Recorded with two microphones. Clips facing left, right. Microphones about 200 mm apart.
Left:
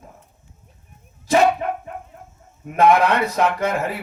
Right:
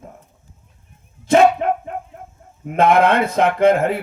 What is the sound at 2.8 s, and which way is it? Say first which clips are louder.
Speech: right 2 dB; 55° right (ahead or behind).